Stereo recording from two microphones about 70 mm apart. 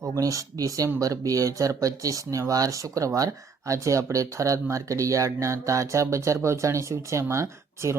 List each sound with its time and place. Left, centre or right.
0.0 s speech: right